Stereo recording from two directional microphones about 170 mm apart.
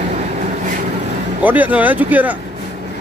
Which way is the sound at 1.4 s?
10° right (ahead or behind).